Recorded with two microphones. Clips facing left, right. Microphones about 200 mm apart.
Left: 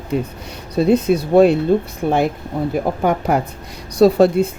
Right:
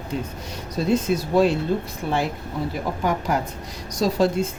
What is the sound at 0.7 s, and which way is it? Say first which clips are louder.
Speech: left 7 dB; 60° left (ahead or behind).